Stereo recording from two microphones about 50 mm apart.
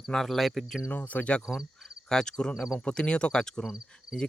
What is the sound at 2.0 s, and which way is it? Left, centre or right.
Cricket, centre.